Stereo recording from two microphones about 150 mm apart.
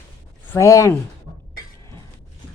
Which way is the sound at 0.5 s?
20° left (ahead or behind).